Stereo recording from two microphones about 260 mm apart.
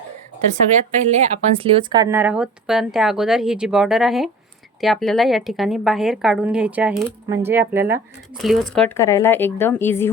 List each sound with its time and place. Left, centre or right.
1.0 s a woman's voice: right; by 10.1 s centre